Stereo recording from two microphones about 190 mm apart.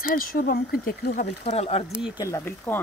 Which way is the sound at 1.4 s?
30° left (ahead or behind).